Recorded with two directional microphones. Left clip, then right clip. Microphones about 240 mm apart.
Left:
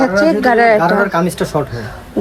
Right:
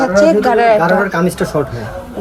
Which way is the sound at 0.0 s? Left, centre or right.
Centre.